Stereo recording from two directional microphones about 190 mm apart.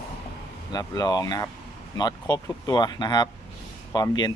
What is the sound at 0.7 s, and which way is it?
Speech, 20° left (ahead or behind).